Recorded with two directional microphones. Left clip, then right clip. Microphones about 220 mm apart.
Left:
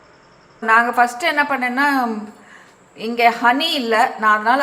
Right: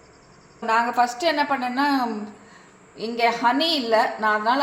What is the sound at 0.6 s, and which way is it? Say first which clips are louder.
A woman's voice: left 6 dB; 10° left (ahead or behind).